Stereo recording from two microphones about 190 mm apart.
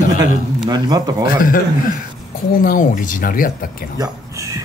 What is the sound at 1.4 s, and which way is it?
Speech, 45° left (ahead or behind).